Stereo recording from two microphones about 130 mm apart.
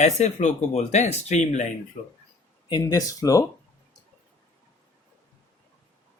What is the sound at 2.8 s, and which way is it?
Speech, 30° left (ahead or behind).